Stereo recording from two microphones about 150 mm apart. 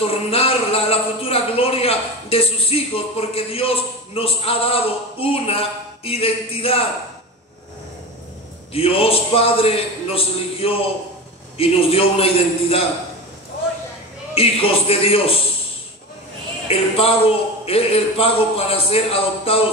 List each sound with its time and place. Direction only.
0.0 s a man's voice: 40° left (ahead or behind)
8.7 s a man's voice: 40° left (ahead or behind)
14.3 s a man's voice: 40° left (ahead or behind)
16.6 s a man's voice: 40° left (ahead or behind)